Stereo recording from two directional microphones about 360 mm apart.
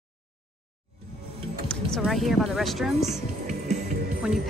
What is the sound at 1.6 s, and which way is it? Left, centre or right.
Music, centre.